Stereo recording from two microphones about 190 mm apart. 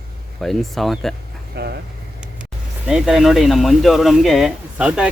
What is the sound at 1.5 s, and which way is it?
Speech, 60° right (ahead or behind).